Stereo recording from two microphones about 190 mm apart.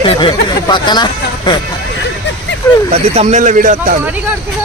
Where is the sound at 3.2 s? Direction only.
40° right (ahead or behind).